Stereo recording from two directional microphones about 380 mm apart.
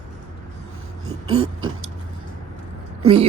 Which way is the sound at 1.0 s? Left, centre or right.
Right.